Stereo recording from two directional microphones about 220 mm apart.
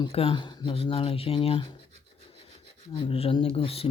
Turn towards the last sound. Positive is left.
turn(degrees=25)  # may be behind; listen again after turning